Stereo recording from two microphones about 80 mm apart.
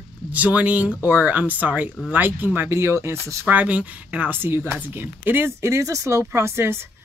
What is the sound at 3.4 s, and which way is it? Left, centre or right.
Speech, centre.